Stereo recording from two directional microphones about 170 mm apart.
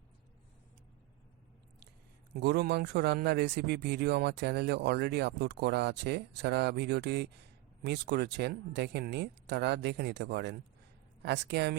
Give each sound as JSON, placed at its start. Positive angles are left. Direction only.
{"t": 2.3, "sound": "speech", "side_deg": -75}